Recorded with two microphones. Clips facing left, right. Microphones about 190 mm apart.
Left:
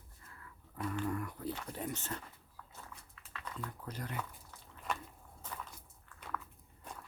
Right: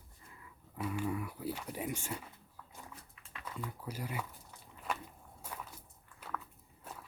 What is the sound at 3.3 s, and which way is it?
Speech, 10° right (ahead or behind).